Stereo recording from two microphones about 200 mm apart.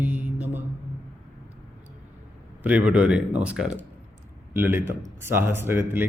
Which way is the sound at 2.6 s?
5° right (ahead or behind).